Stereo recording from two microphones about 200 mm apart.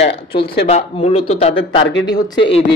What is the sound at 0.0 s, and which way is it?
A man's voice, 25° left (ahead or behind).